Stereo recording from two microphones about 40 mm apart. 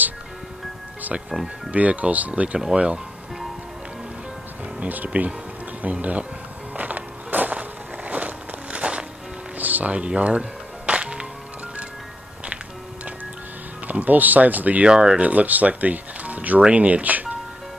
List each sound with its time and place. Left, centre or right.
1.7 s speech: right
4.7 s speech: right
6.7 s a sound: right
9.6 s music: right
9.9 s speech: right
10.9 s music: right
14.0 s speech: right
14.9 s speech: right